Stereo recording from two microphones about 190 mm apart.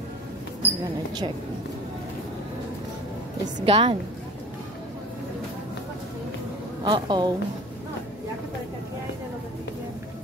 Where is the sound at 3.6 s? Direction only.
30° right (ahead or behind).